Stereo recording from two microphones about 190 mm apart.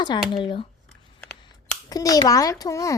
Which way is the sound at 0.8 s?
5° left (ahead or behind).